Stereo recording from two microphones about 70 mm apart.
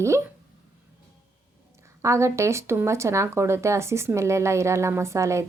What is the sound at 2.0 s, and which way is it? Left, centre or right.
Speech, right.